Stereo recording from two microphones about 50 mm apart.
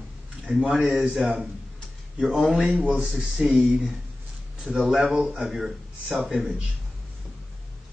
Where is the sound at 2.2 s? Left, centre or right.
Centre.